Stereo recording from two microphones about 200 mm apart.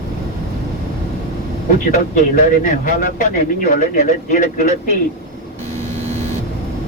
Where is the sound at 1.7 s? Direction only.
40° left (ahead or behind).